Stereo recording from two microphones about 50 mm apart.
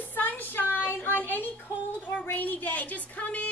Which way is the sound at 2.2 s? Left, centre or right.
Left.